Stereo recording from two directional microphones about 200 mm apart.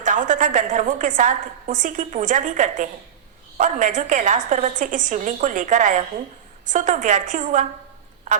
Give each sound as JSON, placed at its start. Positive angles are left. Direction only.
{"t": 0.0, "sound": "a woman's voice", "side_deg": -40}